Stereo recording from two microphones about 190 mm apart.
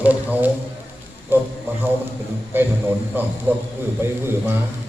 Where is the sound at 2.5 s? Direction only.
10° right (ahead or behind).